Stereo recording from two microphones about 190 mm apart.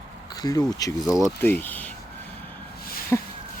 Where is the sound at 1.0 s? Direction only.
Centre (ahead or behind).